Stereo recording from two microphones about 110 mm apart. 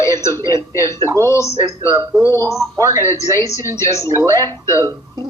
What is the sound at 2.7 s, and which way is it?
Speech, 30° right (ahead or behind).